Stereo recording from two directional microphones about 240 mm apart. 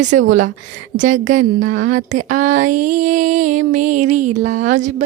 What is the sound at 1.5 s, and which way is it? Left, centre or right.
Speech, right.